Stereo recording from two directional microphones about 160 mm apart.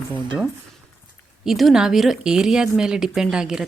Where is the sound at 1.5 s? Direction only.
Centre (ahead or behind).